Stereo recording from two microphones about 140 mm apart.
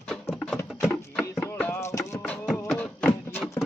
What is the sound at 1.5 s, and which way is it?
Music, 20° left (ahead or behind).